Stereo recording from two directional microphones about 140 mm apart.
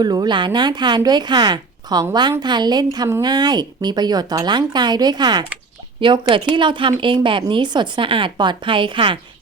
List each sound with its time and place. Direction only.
0.0 s a woman's voice: 30° right (ahead or behind)